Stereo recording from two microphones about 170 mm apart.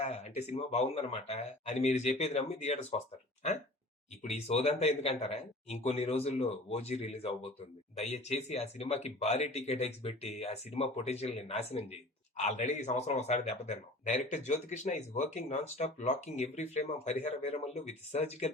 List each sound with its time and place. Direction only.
0.0 s speech: 40° left (ahead or behind)
4.4 s a man's voice: 40° left (ahead or behind)